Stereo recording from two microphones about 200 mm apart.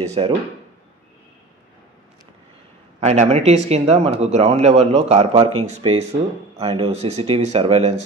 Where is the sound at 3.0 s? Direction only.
35° right (ahead or behind).